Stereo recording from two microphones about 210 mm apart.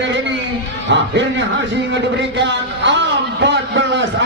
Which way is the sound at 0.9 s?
60° right (ahead or behind).